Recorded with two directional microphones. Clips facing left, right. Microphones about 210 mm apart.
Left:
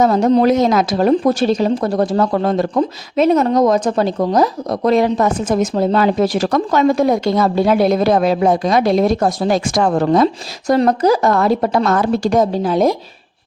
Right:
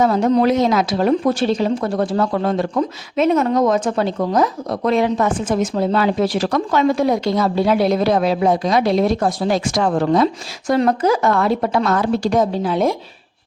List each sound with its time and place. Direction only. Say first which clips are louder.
0.0 s speech: left 3 dB; 40° left (ahead or behind)